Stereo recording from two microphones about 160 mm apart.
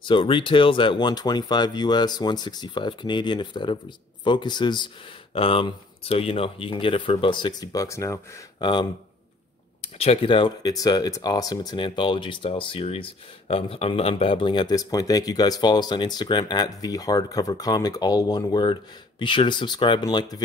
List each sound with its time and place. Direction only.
0.0 s speech: 30° left (ahead or behind)
9.9 s speech: 35° left (ahead or behind)